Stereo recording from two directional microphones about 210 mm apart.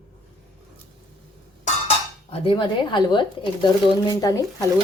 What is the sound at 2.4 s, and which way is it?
Speech, 20° left (ahead or behind).